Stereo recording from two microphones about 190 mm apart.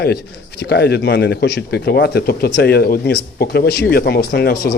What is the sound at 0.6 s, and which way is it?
Speech, 60° left (ahead or behind).